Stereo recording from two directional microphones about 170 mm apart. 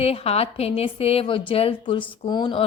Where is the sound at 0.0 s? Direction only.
35° left (ahead or behind).